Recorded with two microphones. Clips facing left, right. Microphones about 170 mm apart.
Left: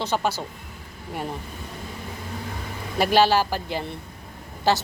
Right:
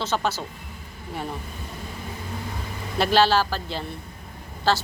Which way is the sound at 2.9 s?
10° left (ahead or behind).